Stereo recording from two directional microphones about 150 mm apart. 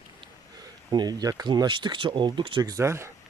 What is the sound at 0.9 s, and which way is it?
Speech, 30° right (ahead or behind).